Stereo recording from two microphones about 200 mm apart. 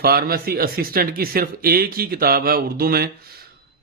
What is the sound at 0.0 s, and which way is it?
A man's voice, 50° right (ahead or behind).